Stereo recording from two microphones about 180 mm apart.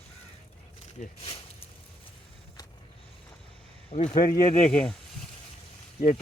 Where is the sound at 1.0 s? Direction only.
30° left (ahead or behind).